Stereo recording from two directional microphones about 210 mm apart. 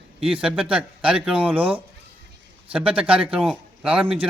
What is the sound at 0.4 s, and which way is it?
Speech, 5° right (ahead or behind).